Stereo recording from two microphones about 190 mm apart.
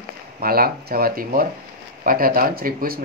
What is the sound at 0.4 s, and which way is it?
Speech, 50° right (ahead or behind).